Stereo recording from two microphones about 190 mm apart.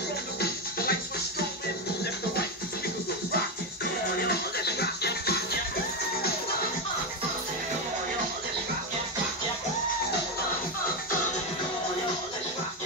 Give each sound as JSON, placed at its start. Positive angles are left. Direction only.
{"t": 0.4, "sound": "music", "side_deg": 50}
{"t": 4.3, "sound": "music", "side_deg": 60}